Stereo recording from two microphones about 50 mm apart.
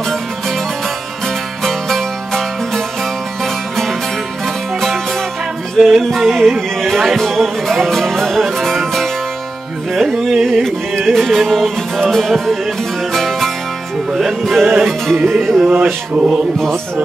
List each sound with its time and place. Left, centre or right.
1.6 s music: centre
4.7 s music: centre
5.8 s music: centre
15.8 s mantra: centre